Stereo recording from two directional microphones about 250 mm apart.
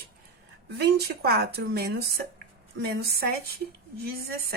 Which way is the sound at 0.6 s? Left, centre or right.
Right.